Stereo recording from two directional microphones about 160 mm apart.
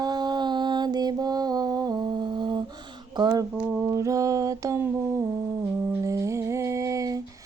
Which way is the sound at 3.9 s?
20° right (ahead or behind).